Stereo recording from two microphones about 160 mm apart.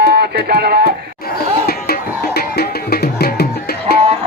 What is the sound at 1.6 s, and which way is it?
Music, 75° left (ahead or behind).